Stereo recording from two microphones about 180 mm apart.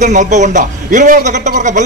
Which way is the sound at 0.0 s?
40° right (ahead or behind).